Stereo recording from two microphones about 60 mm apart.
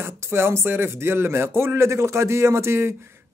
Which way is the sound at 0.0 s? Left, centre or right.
Right.